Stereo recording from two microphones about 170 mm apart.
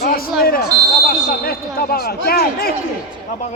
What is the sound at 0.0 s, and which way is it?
Smoke detector, 60° left (ahead or behind).